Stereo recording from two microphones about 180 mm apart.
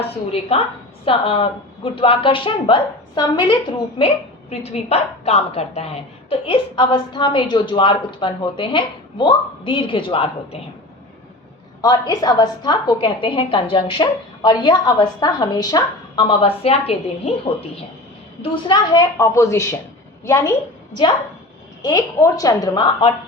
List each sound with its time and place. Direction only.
0.0 s a woman's voice: 35° left (ahead or behind)
11.8 s a woman's voice: 20° left (ahead or behind)
21.8 s a woman's voice: 20° left (ahead or behind)